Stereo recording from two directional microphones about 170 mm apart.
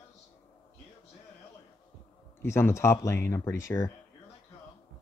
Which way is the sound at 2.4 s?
15° left (ahead or behind).